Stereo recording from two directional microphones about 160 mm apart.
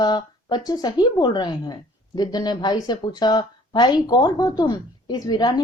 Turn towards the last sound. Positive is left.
turn(degrees=25)  # may be behind; listen again after turning